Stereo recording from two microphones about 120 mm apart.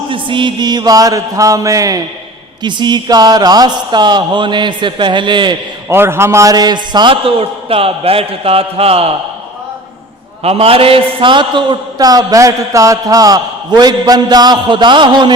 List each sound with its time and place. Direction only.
0.1 s a man's voice: 45° right (ahead or behind)
2.6 s a man's voice: 40° right (ahead or behind)
5.9 s a man's voice: 20° right (ahead or behind); by 9.0 s 55° right (ahead or behind)
10.4 s a man's voice: 55° right (ahead or behind); by 15.4 s 40° right (ahead or behind)